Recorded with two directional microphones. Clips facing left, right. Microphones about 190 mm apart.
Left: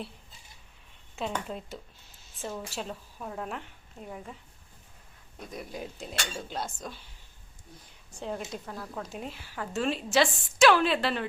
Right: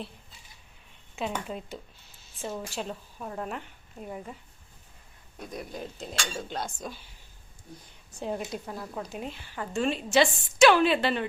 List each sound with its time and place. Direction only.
1.1 s a woman's voice: 5° right (ahead or behind)
5.4 s a woman's voice: centre (ahead or behind)
8.2 s a woman's voice: 15° right (ahead or behind)